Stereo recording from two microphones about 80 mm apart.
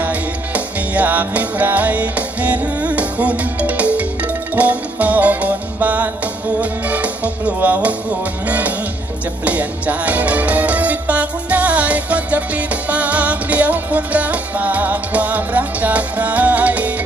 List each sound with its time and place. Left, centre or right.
0.0 s music: centre